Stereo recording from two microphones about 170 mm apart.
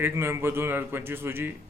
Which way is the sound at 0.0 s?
15° right (ahead or behind).